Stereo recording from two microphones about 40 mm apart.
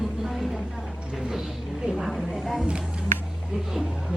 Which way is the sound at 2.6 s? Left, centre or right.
Right.